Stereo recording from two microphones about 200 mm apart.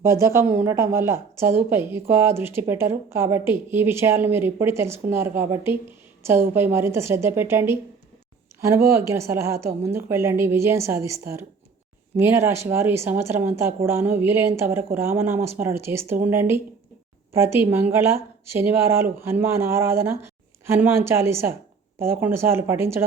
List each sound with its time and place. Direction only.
0.0 s speech: 15° right (ahead or behind)